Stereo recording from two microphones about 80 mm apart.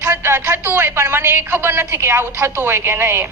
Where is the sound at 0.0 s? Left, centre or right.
Right.